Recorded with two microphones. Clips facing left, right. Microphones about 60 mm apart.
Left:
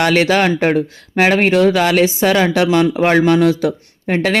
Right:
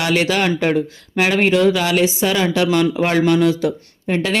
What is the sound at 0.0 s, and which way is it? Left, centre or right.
Speech, left.